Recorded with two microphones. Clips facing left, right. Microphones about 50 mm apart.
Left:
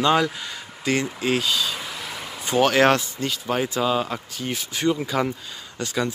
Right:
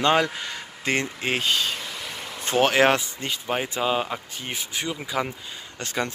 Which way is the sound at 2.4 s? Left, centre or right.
Right.